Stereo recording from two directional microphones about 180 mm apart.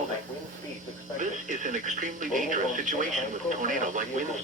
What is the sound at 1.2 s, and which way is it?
Speech, 45° right (ahead or behind).